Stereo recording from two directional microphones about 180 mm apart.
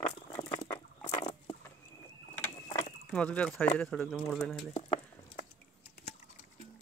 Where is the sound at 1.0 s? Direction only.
30° left (ahead or behind).